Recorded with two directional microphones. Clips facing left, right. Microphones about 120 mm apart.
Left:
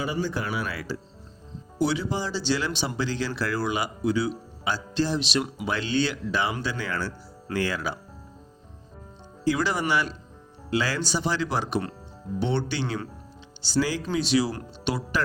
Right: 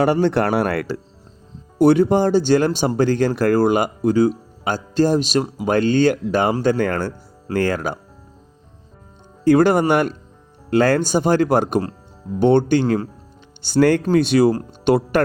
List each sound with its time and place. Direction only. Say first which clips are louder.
0.0 s speech: right 12 dB; 65° right (ahead or behind); by 7.9 s 50° right (ahead or behind)
9.4 s speech: right 11 dB; 50° right (ahead or behind)